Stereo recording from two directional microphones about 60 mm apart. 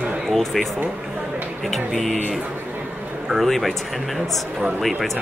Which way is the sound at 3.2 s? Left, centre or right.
Centre.